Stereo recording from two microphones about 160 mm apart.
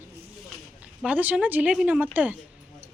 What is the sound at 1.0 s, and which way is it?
Speech, 10° right (ahead or behind).